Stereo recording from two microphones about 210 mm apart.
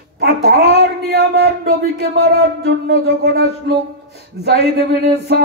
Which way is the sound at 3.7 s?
50° right (ahead or behind).